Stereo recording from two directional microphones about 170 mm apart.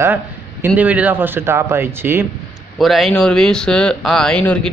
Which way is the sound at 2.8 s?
Centre (ahead or behind).